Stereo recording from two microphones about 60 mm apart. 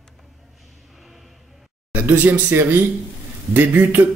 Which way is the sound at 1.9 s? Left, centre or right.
Right.